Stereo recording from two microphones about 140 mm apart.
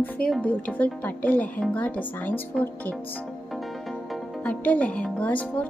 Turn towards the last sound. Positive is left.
turn(degrees=10)  # may be behind; listen again after turning